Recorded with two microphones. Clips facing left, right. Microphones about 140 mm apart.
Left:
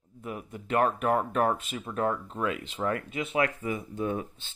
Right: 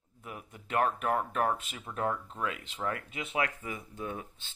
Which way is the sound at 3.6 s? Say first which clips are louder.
Left 8 dB; 10° left (ahead or behind).